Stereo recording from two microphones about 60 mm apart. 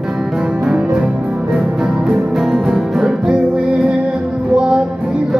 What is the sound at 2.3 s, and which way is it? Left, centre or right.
Music, centre.